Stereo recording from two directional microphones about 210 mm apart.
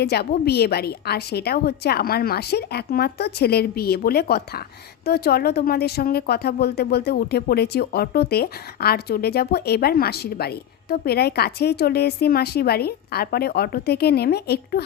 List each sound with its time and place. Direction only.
0.0 s speech: 50° left (ahead or behind)